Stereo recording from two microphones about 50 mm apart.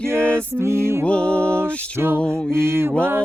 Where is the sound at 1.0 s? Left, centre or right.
Left.